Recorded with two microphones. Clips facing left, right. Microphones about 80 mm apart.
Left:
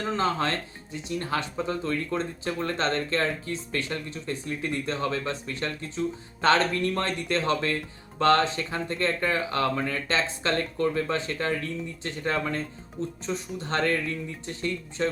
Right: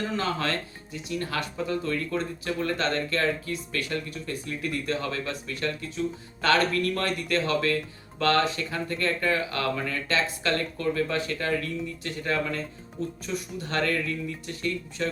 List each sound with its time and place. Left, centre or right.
0.2 s speech: left